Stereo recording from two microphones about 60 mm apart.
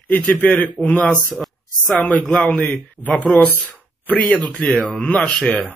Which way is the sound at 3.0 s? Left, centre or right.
Right.